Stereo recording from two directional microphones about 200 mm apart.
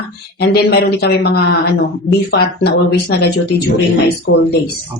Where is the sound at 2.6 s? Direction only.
55° left (ahead or behind).